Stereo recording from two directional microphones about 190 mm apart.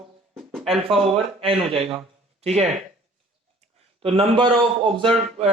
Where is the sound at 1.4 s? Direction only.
30° right (ahead or behind).